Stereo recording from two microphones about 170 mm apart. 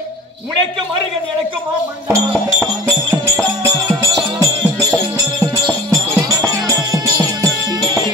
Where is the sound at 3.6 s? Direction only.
25° right (ahead or behind).